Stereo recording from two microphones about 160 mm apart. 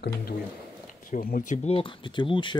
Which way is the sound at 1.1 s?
65° left (ahead or behind).